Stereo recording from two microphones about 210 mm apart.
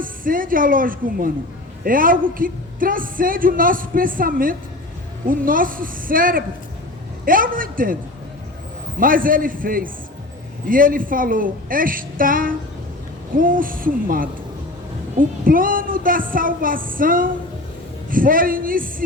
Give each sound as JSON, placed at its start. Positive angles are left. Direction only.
{"t": 0.0, "sound": "a woman's voice", "side_deg": -40}
{"t": 9.0, "sound": "a woman's voice", "side_deg": -40}
{"t": 15.4, "sound": "a woman's voice", "side_deg": -40}